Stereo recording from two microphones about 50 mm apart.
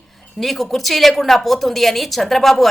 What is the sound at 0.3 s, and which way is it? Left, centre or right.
A woman's voice, centre.